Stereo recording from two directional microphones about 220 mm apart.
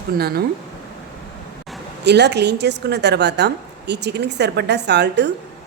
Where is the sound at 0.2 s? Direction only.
45° right (ahead or behind).